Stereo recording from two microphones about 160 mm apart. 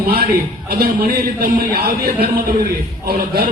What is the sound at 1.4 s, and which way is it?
Speech, 70° right (ahead or behind).